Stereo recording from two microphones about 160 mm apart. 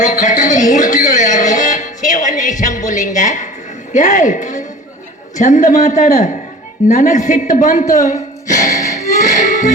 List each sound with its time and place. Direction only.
0.0 s music: 55° left (ahead or behind)
3.9 s a man's voice: 50° left (ahead or behind)
8.0 s a sound: 50° left (ahead or behind)
9.0 s music: 50° left (ahead or behind)